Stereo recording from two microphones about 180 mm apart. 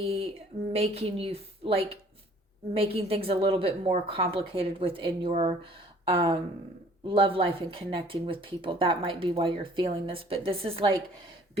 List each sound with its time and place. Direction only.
0.0 s a woman's voice: 30° right (ahead or behind)